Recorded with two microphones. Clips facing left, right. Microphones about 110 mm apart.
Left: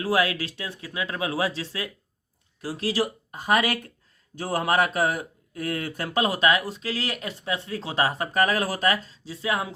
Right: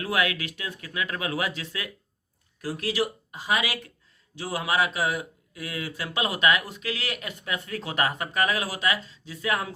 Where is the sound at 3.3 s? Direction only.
50° left (ahead or behind).